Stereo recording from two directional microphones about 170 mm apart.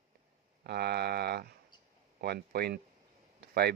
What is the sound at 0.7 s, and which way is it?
Speech, 70° right (ahead or behind).